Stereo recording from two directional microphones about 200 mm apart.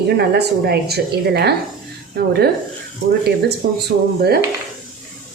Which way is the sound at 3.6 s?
50° right (ahead or behind).